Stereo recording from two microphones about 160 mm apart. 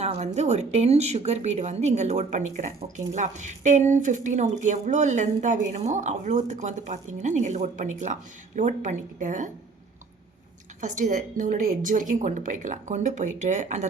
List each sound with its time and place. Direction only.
0.0 s a sound: 45° right (ahead or behind)
0.3 s speech: 45° right (ahead or behind)
10.8 s speech: 50° right (ahead or behind)